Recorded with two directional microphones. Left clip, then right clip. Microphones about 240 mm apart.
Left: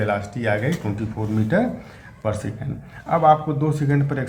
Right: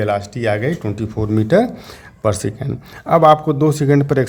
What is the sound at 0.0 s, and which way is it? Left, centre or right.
Speech, right.